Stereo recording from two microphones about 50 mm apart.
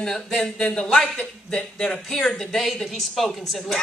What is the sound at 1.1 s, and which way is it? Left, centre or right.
Speech, left.